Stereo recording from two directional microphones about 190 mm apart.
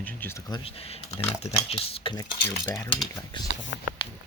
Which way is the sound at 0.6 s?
30° left (ahead or behind).